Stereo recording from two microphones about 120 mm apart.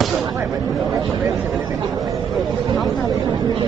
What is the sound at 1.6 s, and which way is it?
Chatter, 30° right (ahead or behind).